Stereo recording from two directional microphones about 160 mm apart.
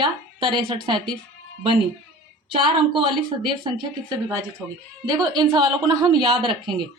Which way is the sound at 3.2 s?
30° right (ahead or behind).